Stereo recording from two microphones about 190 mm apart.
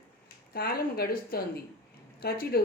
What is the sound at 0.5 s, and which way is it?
A woman's voice, 55° left (ahead or behind).